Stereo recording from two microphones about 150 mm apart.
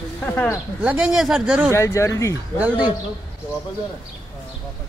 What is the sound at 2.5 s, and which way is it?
Speech, 10° right (ahead or behind).